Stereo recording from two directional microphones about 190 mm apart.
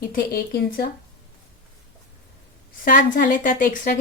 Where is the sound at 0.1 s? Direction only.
55° left (ahead or behind).